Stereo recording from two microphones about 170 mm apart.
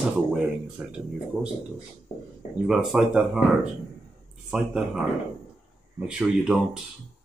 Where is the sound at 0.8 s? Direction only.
10° right (ahead or behind).